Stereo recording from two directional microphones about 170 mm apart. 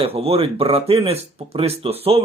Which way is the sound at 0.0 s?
35° right (ahead or behind).